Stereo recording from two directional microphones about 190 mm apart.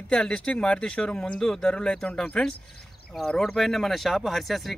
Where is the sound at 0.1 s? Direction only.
5° left (ahead or behind).